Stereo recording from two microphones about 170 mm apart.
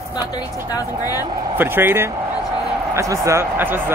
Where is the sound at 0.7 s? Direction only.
20° left (ahead or behind).